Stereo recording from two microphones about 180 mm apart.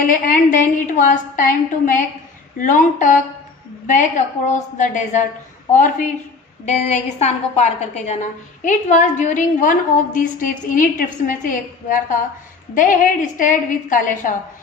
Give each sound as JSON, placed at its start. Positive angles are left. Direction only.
{"t": 0.0, "sound": "a woman's voice", "side_deg": 50}
{"t": 4.4, "sound": "a woman's voice", "side_deg": 45}